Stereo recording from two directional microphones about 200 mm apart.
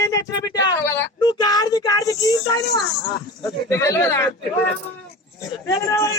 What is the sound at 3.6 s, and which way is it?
Speech, 15° left (ahead or behind).